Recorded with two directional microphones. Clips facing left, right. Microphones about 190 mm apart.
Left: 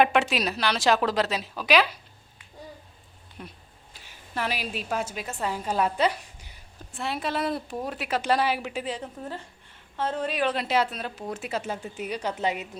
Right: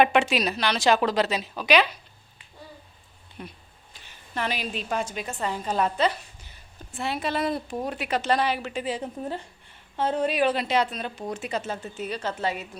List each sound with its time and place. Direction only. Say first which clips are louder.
0.0 s speech: right 1 dB; centre (ahead or behind)
3.4 s a woman's voice: right 2 dB; centre (ahead or behind)
6.9 s a woman's voice: right 1 dB; centre (ahead or behind)
9.2 s a woman's voice: right 4 dB; 15° right (ahead or behind)
10.5 s speech: right 1 dB; centre (ahead or behind); by 12.6 s 20° left (ahead or behind)